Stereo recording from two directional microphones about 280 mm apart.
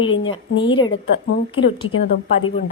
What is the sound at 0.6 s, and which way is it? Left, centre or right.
Speech, centre.